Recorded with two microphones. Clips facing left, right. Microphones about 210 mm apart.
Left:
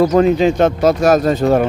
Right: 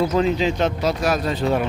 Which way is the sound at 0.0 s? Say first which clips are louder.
Left 7 dB; 50° left (ahead or behind).